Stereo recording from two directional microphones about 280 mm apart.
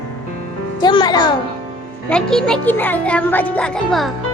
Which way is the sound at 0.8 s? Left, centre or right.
Centre.